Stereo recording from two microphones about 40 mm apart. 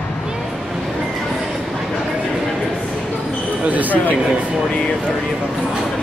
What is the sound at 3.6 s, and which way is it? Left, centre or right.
Speech, right.